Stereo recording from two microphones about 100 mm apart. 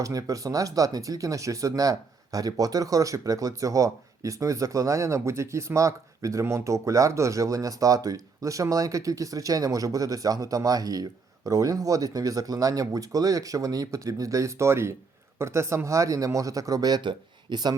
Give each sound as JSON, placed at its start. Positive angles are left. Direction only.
{"t": 0.0, "sound": "speech", "side_deg": -35}